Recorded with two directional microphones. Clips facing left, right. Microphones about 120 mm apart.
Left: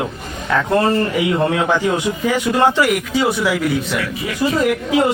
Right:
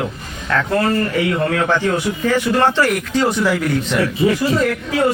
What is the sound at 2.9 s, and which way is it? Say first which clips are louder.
A man's voice: even; 5° left (ahead or behind).